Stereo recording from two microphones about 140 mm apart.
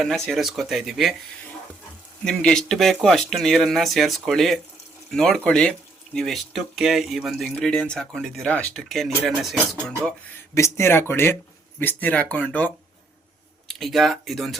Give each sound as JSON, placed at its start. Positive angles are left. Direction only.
{"t": 0.0, "sound": "speech", "side_deg": 0}
{"t": 2.2, "sound": "speech", "side_deg": 5}
{"t": 10.5, "sound": "speech", "side_deg": 20}